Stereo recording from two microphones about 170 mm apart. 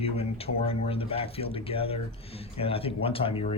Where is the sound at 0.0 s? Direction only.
35° left (ahead or behind).